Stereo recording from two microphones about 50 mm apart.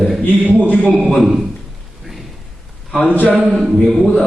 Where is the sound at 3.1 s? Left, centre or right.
Left.